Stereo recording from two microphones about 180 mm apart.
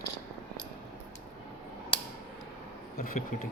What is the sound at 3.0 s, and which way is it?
Speech, 55° left (ahead or behind).